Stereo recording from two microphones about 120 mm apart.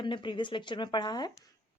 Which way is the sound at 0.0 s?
40° left (ahead or behind).